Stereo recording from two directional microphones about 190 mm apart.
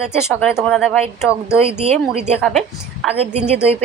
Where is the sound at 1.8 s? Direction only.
35° right (ahead or behind).